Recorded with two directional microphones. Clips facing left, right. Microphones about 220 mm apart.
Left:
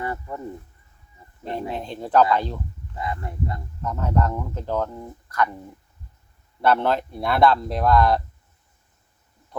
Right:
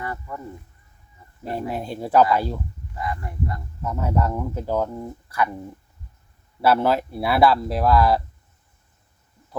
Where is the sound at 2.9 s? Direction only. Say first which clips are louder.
Even; 25° left (ahead or behind).